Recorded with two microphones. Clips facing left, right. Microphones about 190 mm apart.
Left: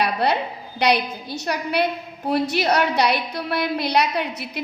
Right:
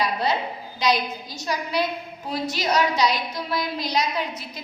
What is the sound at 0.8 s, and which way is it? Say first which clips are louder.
A woman's voice: left 3 dB; 65° left (ahead or behind).